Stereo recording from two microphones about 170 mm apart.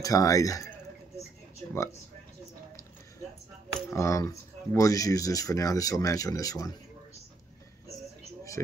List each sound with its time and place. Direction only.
0.0 s speech: 20° left (ahead or behind)
3.9 s speech: 15° left (ahead or behind)